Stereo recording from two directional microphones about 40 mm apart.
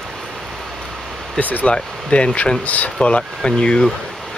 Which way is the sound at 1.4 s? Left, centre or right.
Left.